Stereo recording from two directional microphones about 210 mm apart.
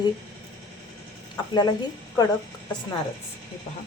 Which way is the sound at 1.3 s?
20° left (ahead or behind).